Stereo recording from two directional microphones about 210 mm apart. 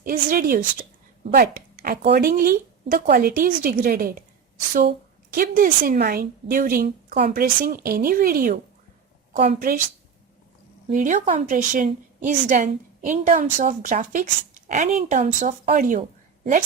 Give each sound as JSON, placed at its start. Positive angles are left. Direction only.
{"t": 0.0, "sound": "a woman's voice", "side_deg": -40}
{"t": 9.3, "sound": "a woman's voice", "side_deg": -30}
{"t": 10.8, "sound": "a woman's voice", "side_deg": -35}